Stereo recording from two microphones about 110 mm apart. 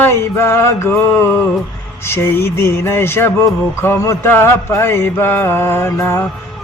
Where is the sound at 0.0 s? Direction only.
20° left (ahead or behind).